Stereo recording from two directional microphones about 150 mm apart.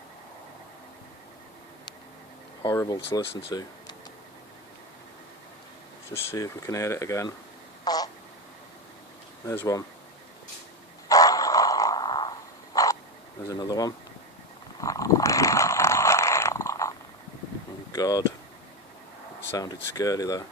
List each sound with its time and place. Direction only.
2.6 s speech: 25° left (ahead or behind)
6.1 s speech: 20° left (ahead or behind)
7.9 s a sound: 25° left (ahead or behind)
9.5 s speech: 20° left (ahead or behind)
11.1 s grunt: 25° left (ahead or behind)
12.7 s frog: 25° left (ahead or behind)
13.5 s speech: 25° left (ahead or behind)
14.8 s a sound: 20° left (ahead or behind)
17.9 s a sound: 25° left (ahead or behind)
19.5 s speech: 20° left (ahead or behind)